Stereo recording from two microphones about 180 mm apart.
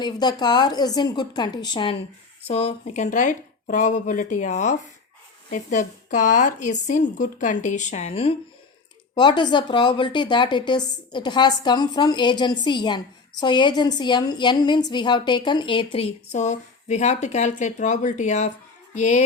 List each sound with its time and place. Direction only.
0.0 s a woman's voice: 25° left (ahead or behind); by 18.5 s 40° left (ahead or behind)
18.9 s music: 40° left (ahead or behind)